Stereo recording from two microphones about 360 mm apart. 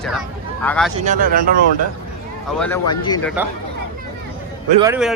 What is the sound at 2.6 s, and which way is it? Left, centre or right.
Speech, centre.